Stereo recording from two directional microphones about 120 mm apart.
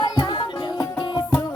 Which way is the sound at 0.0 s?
35° left (ahead or behind).